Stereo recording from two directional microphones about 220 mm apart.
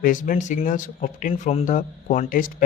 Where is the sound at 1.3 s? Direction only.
30° left (ahead or behind).